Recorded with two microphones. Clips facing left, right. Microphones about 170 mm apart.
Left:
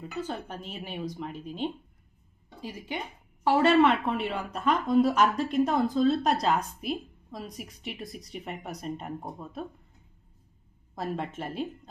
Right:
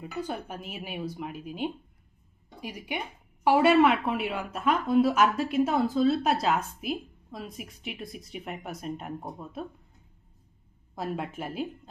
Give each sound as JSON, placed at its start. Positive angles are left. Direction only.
{"t": 0.0, "sound": "a woman's voice", "side_deg": -10}
{"t": 10.9, "sound": "a woman's voice", "side_deg": 0}